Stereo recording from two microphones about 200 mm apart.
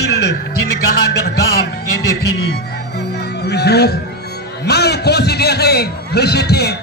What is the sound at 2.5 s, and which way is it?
Music, 55° left (ahead or behind).